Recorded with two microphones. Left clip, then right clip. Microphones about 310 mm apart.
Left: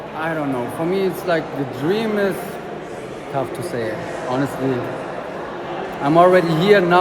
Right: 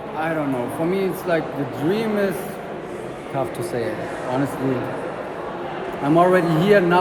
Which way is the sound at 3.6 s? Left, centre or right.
Centre.